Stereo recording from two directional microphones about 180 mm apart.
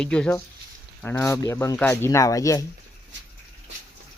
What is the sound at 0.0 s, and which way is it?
Speech, 5° left (ahead or behind).